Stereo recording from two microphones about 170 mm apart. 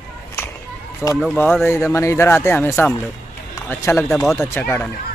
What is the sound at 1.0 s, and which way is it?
Speech, 15° left (ahead or behind).